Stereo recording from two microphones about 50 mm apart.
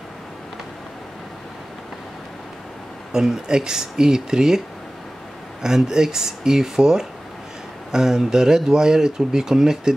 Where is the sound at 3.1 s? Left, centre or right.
Centre.